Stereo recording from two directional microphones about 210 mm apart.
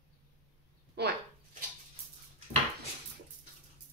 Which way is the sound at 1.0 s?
50° right (ahead or behind).